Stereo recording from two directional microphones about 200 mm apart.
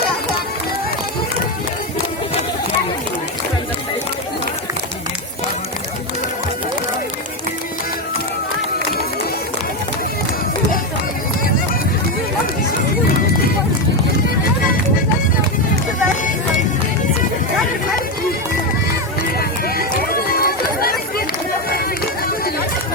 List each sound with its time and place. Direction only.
19.4 s run: 50° left (ahead or behind)